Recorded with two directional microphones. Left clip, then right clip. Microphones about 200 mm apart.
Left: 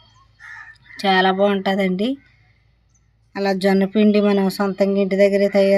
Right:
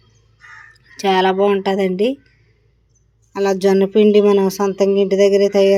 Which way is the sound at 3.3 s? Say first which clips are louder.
Right 4 dB; 5° left (ahead or behind).